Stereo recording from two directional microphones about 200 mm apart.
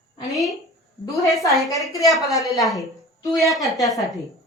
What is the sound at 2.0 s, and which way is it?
A woman's voice, centre (ahead or behind).